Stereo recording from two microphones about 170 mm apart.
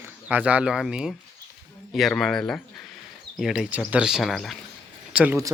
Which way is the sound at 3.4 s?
5° right (ahead or behind).